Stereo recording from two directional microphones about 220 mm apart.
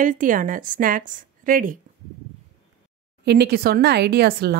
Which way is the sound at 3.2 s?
50° right (ahead or behind).